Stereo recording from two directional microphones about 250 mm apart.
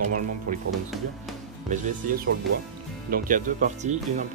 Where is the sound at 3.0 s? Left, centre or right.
Right.